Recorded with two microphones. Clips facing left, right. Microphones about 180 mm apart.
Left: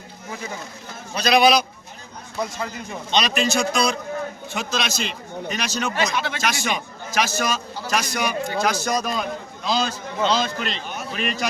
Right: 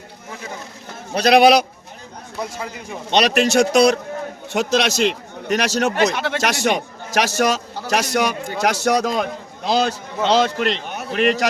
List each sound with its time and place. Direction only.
1.1 s speech: 65° right (ahead or behind)
2.4 s a man's voice: 10° right (ahead or behind)
3.1 s speech: 70° right (ahead or behind)